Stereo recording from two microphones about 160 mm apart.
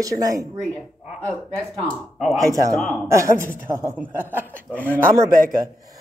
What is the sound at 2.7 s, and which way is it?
Speech, centre (ahead or behind).